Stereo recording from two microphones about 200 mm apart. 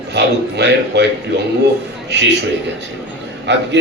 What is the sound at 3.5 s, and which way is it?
Speech, 60° right (ahead or behind).